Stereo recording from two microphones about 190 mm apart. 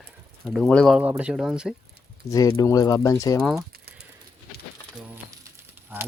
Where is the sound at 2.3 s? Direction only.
20° left (ahead or behind).